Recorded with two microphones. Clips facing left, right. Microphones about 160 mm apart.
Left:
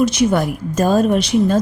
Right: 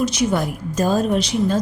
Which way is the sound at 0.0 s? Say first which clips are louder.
Left 4 dB; 55° left (ahead or behind).